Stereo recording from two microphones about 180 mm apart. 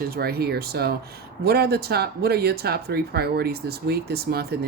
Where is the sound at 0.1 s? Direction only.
60° right (ahead or behind).